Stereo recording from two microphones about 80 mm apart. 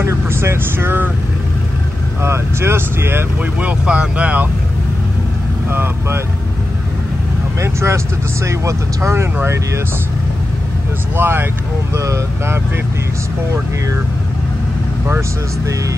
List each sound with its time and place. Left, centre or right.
0.0 s speech: right
2.2 s speech: right
3.8 s speech: centre
5.7 s speech: right
7.6 s speech: right
11.1 s speech: right